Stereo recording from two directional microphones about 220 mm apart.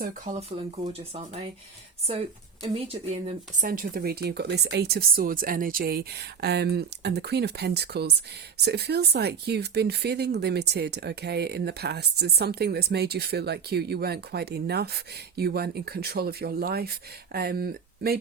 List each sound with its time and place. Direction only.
0.0 s speech: 35° right (ahead or behind)
3.7 s speech: 40° right (ahead or behind)